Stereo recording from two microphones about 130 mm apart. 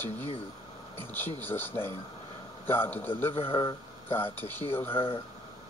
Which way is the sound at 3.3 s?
40° left (ahead or behind).